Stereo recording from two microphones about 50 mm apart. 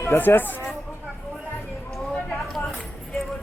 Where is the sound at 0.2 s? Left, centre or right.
Left.